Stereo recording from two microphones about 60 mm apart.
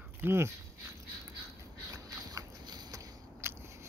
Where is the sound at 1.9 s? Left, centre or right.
Right.